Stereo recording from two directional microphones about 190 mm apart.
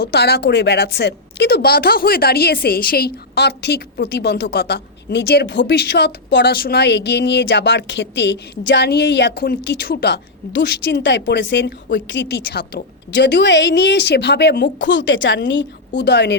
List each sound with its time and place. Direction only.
0.0 s a woman's voice: 60° left (ahead or behind)